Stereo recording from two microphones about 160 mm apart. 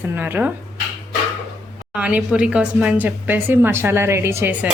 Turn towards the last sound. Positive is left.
turn(degrees=-10)  # may be behind; listen again after turning